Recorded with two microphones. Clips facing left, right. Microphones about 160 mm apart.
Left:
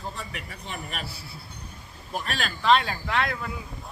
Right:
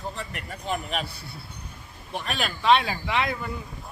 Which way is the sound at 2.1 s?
Centre (ahead or behind).